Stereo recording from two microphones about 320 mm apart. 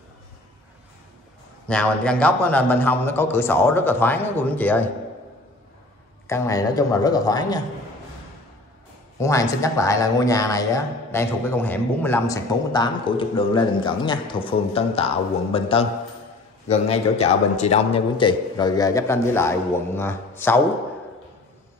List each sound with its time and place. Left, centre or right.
1.7 s a man's voice: centre
6.2 s speech: centre
9.2 s speech: centre